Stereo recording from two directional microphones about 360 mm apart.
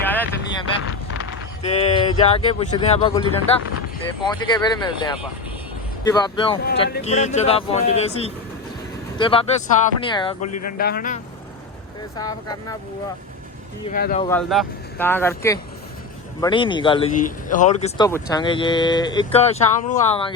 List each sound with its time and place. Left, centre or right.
0.0 s vehicle: centre
1.6 s speech: centre
10.4 s speech: left
10.7 s a man's voice: left
12.1 s speech: centre
13.9 s a man's voice: left
14.3 s speech: centre